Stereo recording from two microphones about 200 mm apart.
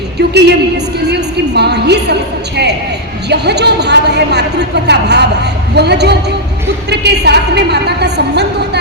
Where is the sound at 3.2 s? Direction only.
55° right (ahead or behind).